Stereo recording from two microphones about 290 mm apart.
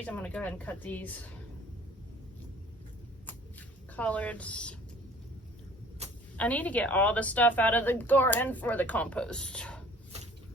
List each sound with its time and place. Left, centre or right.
0.0 s a woman's voice: centre
3.9 s a woman's voice: centre
6.0 s a sound: right
6.3 s a woman's voice: centre